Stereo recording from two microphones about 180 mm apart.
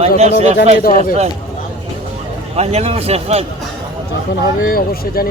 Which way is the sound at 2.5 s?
35° right (ahead or behind).